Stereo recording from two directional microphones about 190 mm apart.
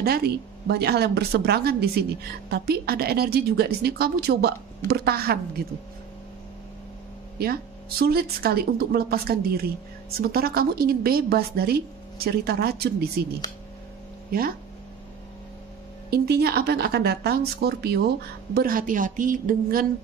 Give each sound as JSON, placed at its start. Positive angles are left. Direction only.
{"t": 0.0, "sound": "a woman's voice", "side_deg": -55}
{"t": 8.0, "sound": "a woman's voice", "side_deg": -55}
{"t": 16.1, "sound": "a woman's voice", "side_deg": -55}